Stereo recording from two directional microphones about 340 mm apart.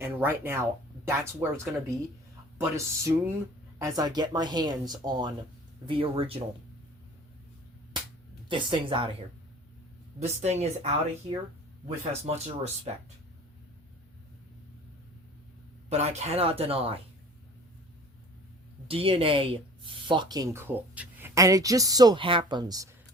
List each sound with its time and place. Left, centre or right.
0.0 s speech: centre
8.4 s speech: centre
10.2 s a woman's voice: centre
15.9 s speech: centre
18.9 s speech: centre